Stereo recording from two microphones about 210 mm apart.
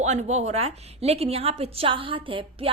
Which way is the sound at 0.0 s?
35° right (ahead or behind).